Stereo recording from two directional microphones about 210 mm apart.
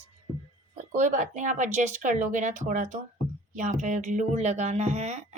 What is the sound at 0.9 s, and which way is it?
A woman's voice, 35° right (ahead or behind).